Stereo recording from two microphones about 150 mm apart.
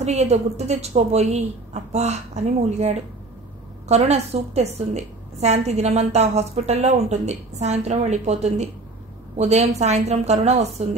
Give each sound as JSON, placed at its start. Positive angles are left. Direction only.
{"t": 0.0, "sound": "a woman's voice", "side_deg": -45}